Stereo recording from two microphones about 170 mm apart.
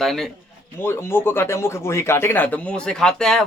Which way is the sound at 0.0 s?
Centre (ahead or behind).